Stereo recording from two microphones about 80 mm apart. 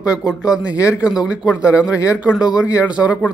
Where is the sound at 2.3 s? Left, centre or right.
Centre.